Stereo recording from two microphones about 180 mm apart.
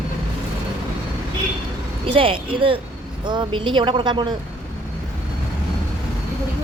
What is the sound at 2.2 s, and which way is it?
Speech, 30° right (ahead or behind).